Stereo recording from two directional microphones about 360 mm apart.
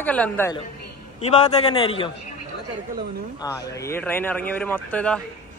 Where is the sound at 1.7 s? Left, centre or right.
Centre.